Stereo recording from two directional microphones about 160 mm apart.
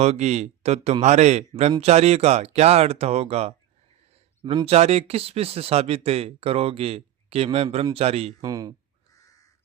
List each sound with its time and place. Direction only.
0.0 s speech: 45° right (ahead or behind)
8.4 s speech: 20° right (ahead or behind)